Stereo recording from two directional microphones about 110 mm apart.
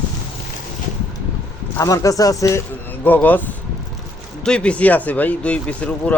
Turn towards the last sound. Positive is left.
turn(degrees=10)  # may be behind; listen again after turning